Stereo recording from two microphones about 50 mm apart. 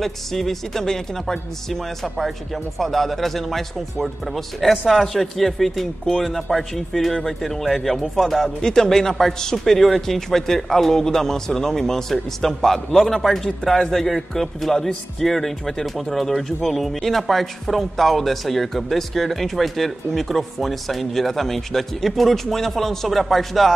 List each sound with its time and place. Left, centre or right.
0.0 s a man's voice: centre